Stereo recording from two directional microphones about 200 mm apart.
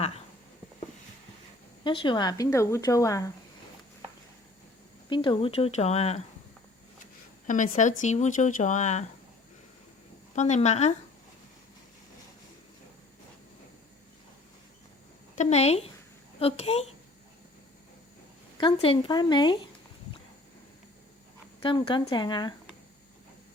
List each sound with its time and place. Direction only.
1.8 s speech: 25° left (ahead or behind)
5.0 s speech: 25° left (ahead or behind)
7.4 s speech: 40° left (ahead or behind)
10.3 s speech: 35° left (ahead or behind)
15.4 s speech: 35° left (ahead or behind)
18.5 s speech: 25° left (ahead or behind)
21.6 s speech: 25° left (ahead or behind)